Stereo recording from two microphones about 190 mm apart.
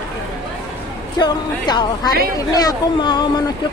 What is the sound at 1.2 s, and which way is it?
Speech, 20° left (ahead or behind).